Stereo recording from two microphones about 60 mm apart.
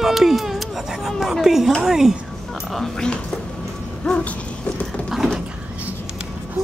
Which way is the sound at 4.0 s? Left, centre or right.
Left.